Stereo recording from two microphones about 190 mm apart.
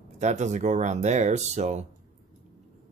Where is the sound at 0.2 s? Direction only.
40° right (ahead or behind).